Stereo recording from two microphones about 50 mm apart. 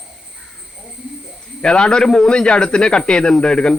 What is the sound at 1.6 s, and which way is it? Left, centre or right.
Speech, centre.